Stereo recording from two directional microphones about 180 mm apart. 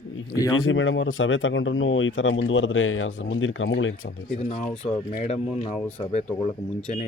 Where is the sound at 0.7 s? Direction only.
90° left.